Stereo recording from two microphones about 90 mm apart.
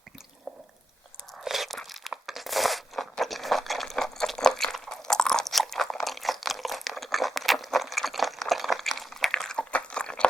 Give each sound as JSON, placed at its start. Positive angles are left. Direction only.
{"t": 1.4, "sound": "crunch", "side_deg": 0}